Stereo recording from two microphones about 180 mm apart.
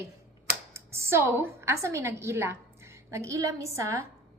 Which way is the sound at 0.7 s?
15° right (ahead or behind).